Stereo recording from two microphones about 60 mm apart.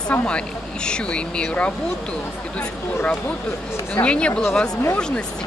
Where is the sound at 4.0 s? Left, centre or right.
Centre.